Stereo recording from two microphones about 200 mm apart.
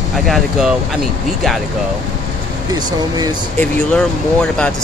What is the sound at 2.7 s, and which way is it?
Speech, 20° right (ahead or behind).